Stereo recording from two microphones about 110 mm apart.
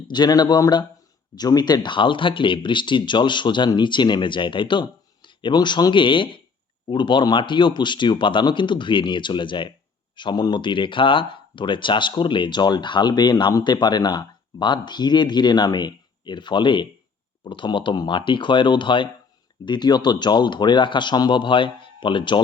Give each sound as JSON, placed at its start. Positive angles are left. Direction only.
{"t": 0.1, "sound": "speech", "side_deg": 40}